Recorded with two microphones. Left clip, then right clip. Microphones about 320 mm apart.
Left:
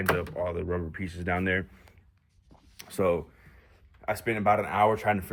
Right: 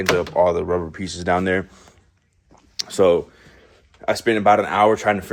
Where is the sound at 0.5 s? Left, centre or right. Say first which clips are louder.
Right 11 dB; centre.